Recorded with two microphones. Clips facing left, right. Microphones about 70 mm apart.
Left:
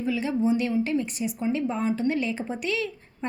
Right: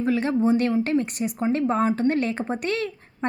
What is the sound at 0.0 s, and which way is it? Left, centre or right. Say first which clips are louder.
A woman's voice: right 4 dB; right.